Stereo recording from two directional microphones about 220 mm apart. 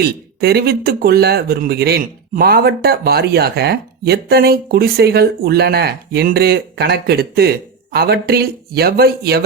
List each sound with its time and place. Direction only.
0.0 s speech: 45° right (ahead or behind)